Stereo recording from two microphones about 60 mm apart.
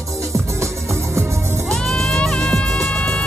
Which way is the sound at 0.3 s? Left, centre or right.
Right.